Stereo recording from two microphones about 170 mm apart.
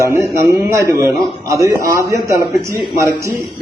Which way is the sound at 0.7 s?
20° right (ahead or behind).